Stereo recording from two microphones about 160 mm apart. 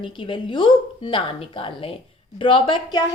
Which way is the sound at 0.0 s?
30° left (ahead or behind).